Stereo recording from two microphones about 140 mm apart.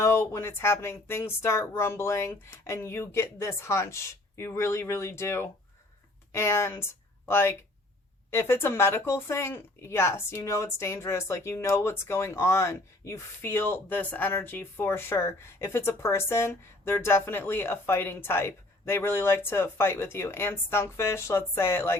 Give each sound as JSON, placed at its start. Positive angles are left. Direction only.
{"t": 0.0, "sound": "speech", "side_deg": 20}